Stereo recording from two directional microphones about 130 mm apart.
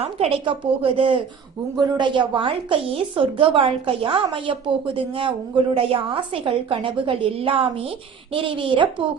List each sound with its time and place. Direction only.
0.0 s a woman's voice: 50° right (ahead or behind)